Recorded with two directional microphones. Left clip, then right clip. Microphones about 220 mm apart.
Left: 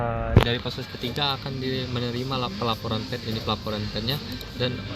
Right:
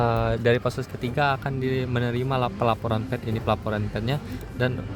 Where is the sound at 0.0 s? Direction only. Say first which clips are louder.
Right 2 dB; 55° right (ahead or behind).